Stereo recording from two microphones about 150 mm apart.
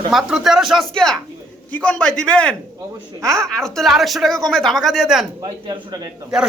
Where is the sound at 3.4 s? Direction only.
5° left (ahead or behind).